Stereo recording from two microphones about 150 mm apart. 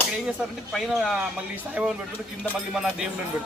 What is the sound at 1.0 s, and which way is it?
A man's voice, 5° right (ahead or behind).